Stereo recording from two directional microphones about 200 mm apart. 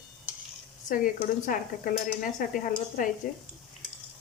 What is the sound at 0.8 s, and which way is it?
Speech, 45° left (ahead or behind).